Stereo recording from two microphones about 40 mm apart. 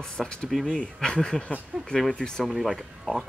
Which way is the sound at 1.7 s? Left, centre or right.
Right.